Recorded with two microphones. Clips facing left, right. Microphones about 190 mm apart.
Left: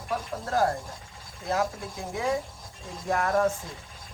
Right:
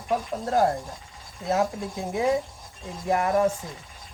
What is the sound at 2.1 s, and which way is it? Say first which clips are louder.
Speech: right 4 dB; 20° right (ahead or behind).